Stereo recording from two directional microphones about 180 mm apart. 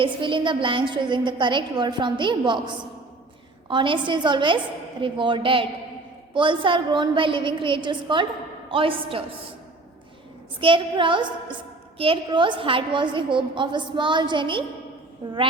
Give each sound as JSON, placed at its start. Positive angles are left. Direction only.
{"t": 0.0, "sound": "a woman's voice", "side_deg": -30}
{"t": 10.6, "sound": "a woman's voice", "side_deg": -30}